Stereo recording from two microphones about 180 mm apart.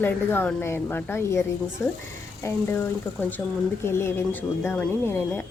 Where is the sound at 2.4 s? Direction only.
10° left (ahead or behind).